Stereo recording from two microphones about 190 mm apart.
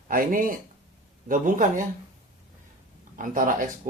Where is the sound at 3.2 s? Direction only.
45° right (ahead or behind).